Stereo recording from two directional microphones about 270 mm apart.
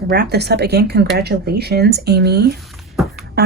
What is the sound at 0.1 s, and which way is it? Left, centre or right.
Speech, right.